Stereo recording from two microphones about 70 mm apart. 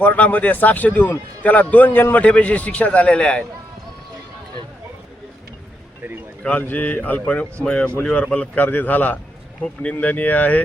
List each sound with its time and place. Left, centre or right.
0.0 s a man's voice: left
6.4 s a man's voice: left